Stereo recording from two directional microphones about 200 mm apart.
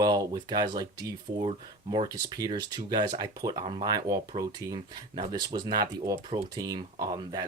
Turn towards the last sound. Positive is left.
turn(degrees=-20)  # may be behind; listen again after turning